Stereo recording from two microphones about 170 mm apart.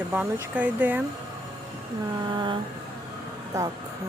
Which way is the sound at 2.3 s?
30° right (ahead or behind).